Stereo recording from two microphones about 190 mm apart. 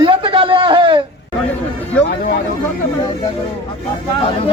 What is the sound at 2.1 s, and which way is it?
Speech, 60° left (ahead or behind).